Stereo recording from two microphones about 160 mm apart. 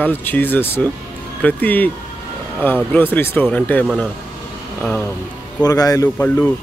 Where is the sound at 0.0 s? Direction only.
10° left (ahead or behind).